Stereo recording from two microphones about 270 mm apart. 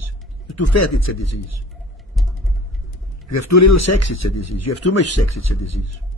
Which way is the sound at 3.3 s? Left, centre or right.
Left.